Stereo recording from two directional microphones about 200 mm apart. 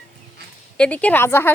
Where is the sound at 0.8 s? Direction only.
5° left (ahead or behind).